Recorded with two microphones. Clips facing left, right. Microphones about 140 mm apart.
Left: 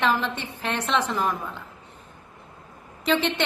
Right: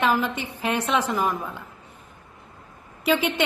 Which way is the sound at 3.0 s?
10° right (ahead or behind).